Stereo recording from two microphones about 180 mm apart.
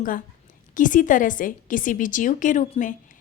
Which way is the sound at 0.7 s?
45° left (ahead or behind).